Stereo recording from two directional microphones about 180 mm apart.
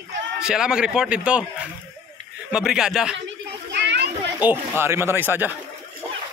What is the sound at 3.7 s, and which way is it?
Children playing, 65° right (ahead or behind).